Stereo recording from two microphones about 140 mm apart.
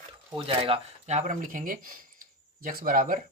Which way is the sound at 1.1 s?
65° right (ahead or behind).